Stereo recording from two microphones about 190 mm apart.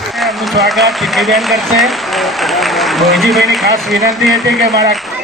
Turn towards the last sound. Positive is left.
turn(degrees=0)  # may be behind; listen again after turning